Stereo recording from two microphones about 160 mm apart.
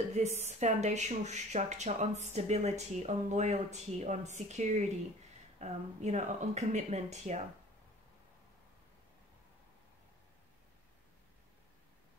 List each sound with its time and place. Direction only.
0.1 s a woman's voice: 45° right (ahead or behind)